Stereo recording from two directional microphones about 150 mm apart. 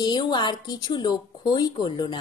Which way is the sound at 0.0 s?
30° left (ahead or behind).